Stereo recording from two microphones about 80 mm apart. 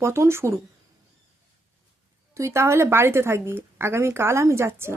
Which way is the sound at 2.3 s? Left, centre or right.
Right.